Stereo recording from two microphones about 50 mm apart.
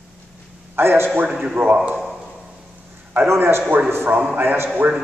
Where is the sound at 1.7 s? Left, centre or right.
Right.